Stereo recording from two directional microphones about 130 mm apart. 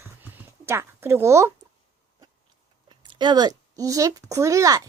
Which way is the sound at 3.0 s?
35° right (ahead or behind).